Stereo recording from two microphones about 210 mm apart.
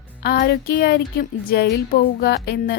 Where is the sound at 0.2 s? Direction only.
45° left (ahead or behind).